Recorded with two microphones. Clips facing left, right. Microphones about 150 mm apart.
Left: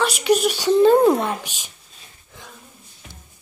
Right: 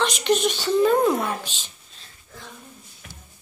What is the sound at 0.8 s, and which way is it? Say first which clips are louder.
Speech: left 6 dB; 30° left (ahead or behind).